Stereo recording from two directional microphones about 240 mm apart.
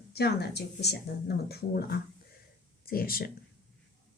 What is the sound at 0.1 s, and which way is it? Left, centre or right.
Speech, left.